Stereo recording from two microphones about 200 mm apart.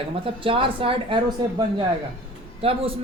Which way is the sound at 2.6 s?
30° right (ahead or behind).